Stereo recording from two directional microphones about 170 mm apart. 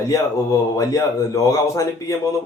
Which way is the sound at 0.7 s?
20° left (ahead or behind).